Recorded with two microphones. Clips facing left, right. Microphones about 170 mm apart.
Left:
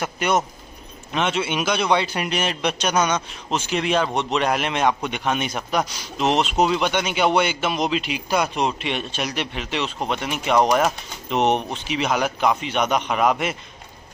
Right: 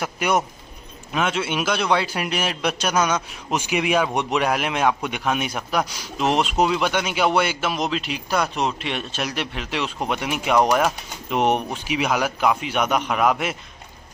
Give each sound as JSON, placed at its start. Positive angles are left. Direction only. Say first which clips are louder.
{"t": 0.0, "sound": "a man's voice", "louder": "even", "side_deg": -5}